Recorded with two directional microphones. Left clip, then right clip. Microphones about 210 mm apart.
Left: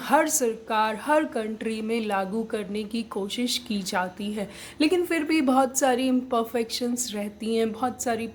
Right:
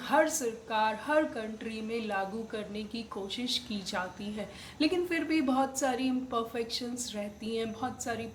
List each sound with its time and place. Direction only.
0.1 s a woman's voice: 45° left (ahead or behind)